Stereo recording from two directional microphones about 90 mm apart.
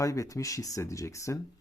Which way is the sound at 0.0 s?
35° left (ahead or behind).